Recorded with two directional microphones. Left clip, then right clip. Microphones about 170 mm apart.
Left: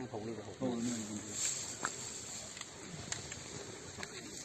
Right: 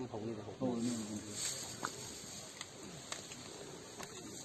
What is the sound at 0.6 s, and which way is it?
Speech, 20° right (ahead or behind).